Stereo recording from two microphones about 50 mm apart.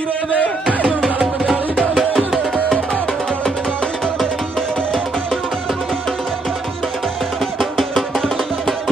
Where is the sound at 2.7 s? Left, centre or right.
Centre.